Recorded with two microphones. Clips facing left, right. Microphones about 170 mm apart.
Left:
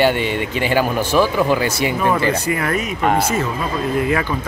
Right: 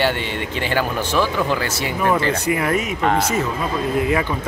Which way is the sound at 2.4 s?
15° right (ahead or behind).